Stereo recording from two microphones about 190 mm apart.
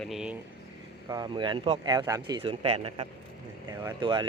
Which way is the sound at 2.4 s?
30° right (ahead or behind).